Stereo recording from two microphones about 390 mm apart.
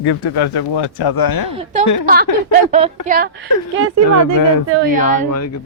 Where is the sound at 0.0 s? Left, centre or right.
Left.